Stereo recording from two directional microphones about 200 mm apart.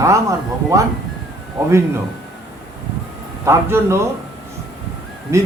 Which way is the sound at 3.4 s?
15° right (ahead or behind).